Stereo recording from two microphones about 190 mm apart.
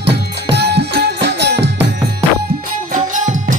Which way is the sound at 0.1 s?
60° right (ahead or behind).